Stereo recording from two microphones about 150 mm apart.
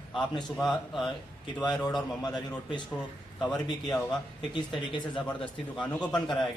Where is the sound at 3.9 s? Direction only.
25° left (ahead or behind).